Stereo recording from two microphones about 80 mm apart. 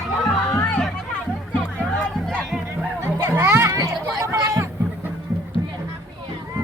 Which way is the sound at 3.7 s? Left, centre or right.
Right.